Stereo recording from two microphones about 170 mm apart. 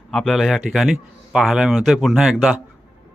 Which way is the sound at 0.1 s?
5° left (ahead or behind).